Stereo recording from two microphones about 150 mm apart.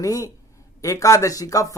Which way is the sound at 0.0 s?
20° left (ahead or behind).